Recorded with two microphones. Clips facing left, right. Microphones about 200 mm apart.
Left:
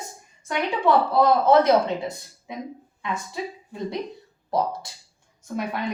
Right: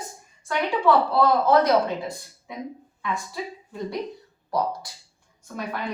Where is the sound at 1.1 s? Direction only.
25° left (ahead or behind).